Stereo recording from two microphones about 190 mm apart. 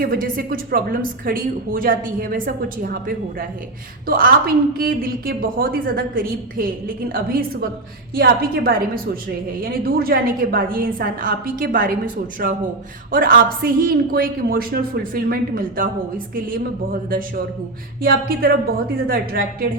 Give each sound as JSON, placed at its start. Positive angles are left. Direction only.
{"t": 0.0, "sound": "a woman's voice", "side_deg": -50}